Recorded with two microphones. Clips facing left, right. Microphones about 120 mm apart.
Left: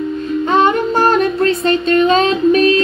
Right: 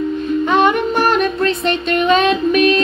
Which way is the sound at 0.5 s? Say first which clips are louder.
Left 2 dB; 30° left (ahead or behind).